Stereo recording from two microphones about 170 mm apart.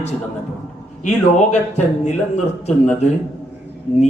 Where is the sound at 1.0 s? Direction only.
45° left (ahead or behind).